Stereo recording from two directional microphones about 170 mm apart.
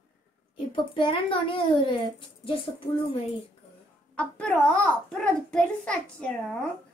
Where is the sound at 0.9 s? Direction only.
30° left (ahead or behind).